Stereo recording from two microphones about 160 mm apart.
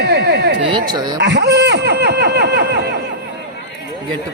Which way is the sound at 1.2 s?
90° right.